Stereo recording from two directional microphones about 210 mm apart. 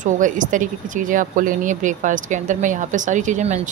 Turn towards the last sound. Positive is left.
turn(degrees=-35)  # may be behind; listen again after turning